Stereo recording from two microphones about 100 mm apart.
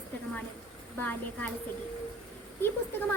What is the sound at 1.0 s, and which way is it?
Speech, 15° left (ahead or behind).